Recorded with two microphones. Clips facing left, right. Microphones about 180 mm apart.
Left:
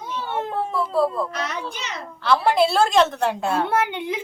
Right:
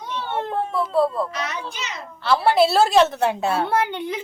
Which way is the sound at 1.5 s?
55° left (ahead or behind).